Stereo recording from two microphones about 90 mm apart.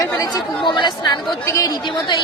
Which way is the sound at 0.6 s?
60° left (ahead or behind).